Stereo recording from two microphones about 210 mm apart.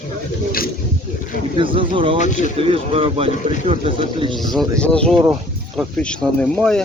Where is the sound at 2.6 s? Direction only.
25° right (ahead or behind).